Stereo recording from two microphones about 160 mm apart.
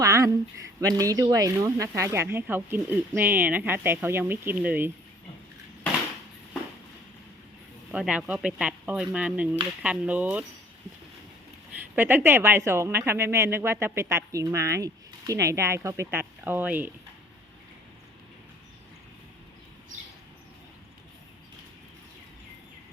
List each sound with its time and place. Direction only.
0.0 s a woman's voice: 20° right (ahead or behind)
7.9 s a woman's voice: 5° right (ahead or behind)
11.9 s a woman's voice: 15° right (ahead or behind)